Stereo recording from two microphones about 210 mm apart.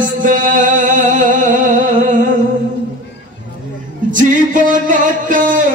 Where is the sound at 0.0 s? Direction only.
40° right (ahead or behind).